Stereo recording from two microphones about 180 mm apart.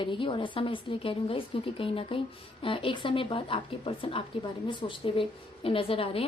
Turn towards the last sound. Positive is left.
turn(degrees=30)  # may be behind; listen again after turning